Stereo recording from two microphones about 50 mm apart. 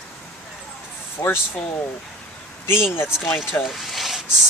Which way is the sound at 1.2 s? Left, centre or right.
Left.